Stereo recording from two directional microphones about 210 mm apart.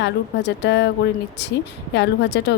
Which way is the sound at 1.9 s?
55° left (ahead or behind).